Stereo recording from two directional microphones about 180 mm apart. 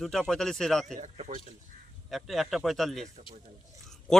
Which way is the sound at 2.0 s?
Centre (ahead or behind).